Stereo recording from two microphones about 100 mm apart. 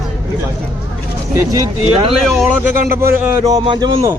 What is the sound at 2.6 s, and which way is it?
Speech, 25° right (ahead or behind).